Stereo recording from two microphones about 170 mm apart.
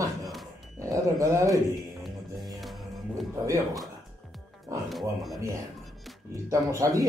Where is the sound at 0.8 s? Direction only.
20° right (ahead or behind).